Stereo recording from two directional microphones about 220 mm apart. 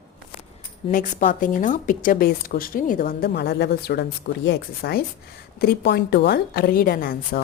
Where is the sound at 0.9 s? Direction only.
40° left (ahead or behind).